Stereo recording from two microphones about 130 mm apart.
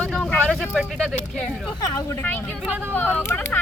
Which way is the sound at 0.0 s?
5° left (ahead or behind).